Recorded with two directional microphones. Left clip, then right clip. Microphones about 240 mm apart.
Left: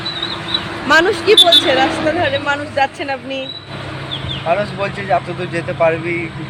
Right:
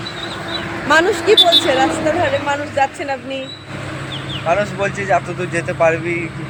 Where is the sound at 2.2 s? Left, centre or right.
Centre.